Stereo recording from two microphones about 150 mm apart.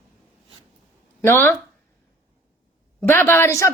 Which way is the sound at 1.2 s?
15° left (ahead or behind).